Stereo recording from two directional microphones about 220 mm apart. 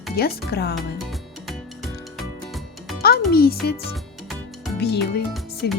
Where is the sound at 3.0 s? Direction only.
45° left (ahead or behind).